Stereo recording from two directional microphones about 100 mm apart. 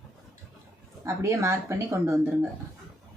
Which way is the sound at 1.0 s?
30° right (ahead or behind).